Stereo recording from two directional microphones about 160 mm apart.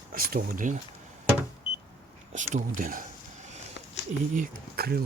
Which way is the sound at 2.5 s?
55° right (ahead or behind).